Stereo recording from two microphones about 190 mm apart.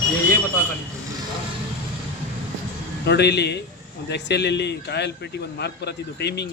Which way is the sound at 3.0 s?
60° left (ahead or behind).